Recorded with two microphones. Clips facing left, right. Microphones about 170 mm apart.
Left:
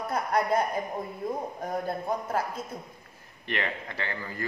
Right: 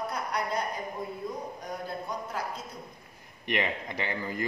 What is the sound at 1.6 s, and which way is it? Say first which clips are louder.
Speech: left 5 dB; 50° left (ahead or behind).